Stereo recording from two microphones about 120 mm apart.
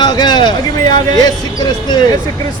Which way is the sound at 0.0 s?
35° left (ahead or behind).